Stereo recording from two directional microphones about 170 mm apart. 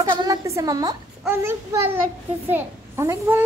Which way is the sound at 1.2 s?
15° right (ahead or behind).